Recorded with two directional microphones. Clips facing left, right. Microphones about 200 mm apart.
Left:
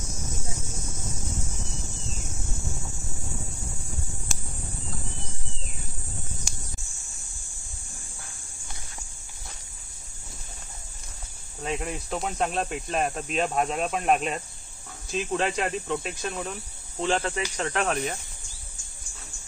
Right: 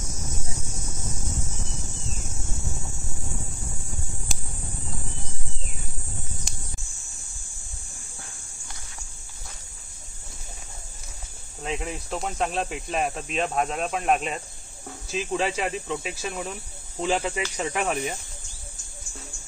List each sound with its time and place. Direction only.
11.6 s cricket: centre (ahead or behind)
17.0 s speech: 10° right (ahead or behind)